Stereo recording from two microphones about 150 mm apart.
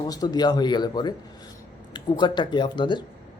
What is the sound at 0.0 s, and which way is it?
Speech, 25° left (ahead or behind).